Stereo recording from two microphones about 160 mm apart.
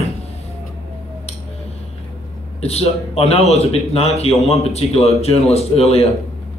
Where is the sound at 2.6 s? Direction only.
40° left (ahead or behind).